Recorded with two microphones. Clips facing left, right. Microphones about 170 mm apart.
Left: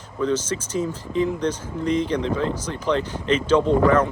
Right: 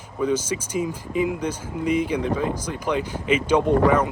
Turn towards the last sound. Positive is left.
turn(degrees=-10)  # may be behind; listen again after turning